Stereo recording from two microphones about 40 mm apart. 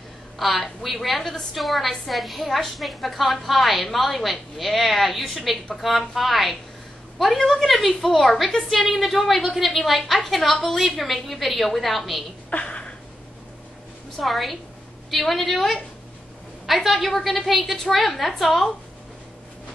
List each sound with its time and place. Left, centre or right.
0.4 s a woman's voice: centre
12.4 s a sound: left
14.2 s a woman's voice: centre